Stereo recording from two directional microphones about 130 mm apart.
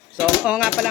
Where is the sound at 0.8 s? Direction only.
Centre (ahead or behind).